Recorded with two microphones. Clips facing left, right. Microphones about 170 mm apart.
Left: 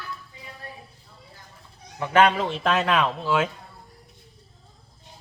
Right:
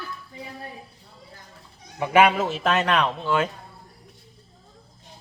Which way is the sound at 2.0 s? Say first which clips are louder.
Right 1 dB; 10° right (ahead or behind).